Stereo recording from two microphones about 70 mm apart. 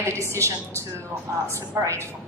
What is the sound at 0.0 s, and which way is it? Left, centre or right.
A woman's voice, right.